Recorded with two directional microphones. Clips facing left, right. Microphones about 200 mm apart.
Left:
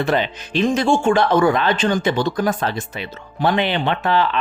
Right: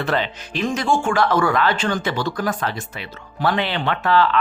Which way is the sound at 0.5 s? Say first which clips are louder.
Left 4 dB; 25° left (ahead or behind).